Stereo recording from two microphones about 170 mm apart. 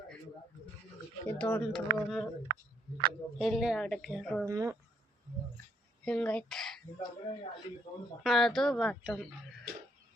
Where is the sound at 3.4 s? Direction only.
Centre (ahead or behind).